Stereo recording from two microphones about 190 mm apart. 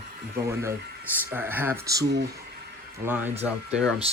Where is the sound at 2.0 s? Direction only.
60° right (ahead or behind).